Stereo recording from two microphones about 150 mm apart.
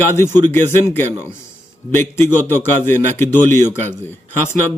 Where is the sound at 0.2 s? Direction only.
20° left (ahead or behind).